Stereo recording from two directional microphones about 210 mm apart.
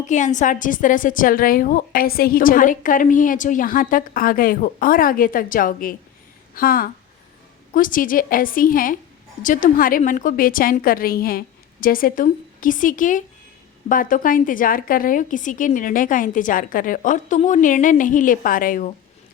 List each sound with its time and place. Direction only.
0.1 s a woman's voice: 35° left (ahead or behind)